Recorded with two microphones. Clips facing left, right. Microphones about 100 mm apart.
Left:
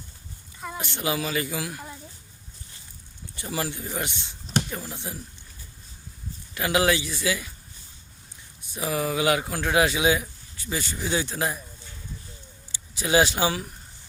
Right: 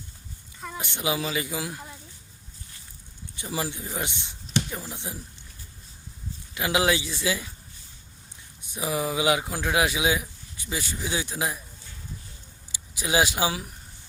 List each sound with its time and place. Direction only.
0.8 s speech: 15° right (ahead or behind)
3.5 s speech: 15° right (ahead or behind)
6.5 s a man's voice: 15° right (ahead or behind)
8.7 s speech: 10° right (ahead or behind)
12.7 s speech: 10° right (ahead or behind)